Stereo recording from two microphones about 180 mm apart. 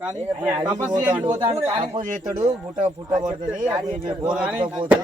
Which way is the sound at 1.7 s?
40° right (ahead or behind).